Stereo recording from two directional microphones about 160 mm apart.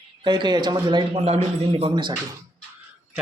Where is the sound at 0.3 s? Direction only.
30° right (ahead or behind).